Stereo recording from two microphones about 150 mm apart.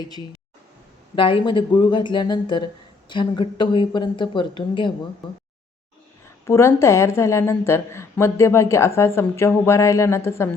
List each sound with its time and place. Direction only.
1.1 s speech: 35° left (ahead or behind)
6.4 s a woman's voice: 20° left (ahead or behind)